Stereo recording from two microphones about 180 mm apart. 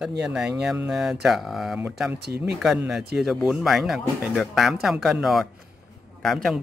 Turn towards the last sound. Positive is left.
turn(degrees=0)  # may be behind; listen again after turning